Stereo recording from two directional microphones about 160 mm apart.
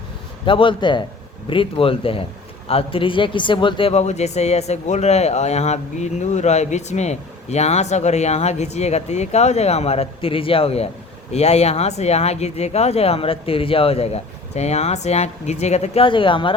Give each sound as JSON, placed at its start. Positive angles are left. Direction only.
{"t": 0.4, "sound": "speech", "side_deg": 30}